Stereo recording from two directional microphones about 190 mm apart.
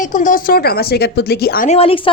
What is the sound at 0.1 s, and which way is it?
Speech, 45° left (ahead or behind).